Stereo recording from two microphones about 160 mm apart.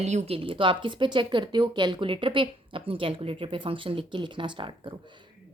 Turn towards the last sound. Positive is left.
turn(degrees=-30)  # may be behind; listen again after turning